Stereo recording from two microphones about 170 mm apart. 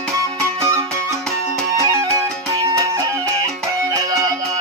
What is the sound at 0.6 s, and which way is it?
Music, 15° right (ahead or behind).